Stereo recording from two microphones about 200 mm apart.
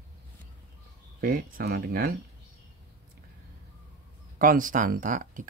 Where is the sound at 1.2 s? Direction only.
45° right (ahead or behind).